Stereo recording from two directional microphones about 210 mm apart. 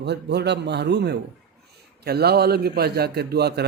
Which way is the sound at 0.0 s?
55° right (ahead or behind).